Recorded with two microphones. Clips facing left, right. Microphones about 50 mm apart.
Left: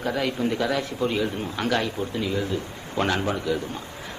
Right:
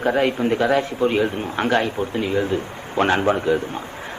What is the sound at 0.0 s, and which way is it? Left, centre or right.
A man's voice, right.